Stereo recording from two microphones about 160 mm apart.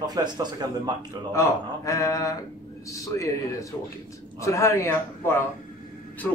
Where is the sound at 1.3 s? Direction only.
20° left (ahead or behind).